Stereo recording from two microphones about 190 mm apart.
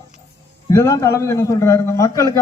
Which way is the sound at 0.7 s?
15° left (ahead or behind).